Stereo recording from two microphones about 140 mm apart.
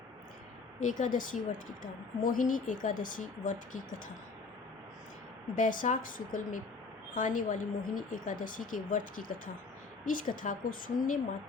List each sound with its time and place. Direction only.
0.8 s a woman's voice: 60° left (ahead or behind)
5.5 s a woman's voice: 65° left (ahead or behind)